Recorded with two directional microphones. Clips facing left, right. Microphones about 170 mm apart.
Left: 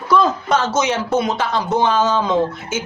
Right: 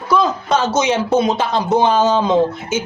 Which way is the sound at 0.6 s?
15° right (ahead or behind).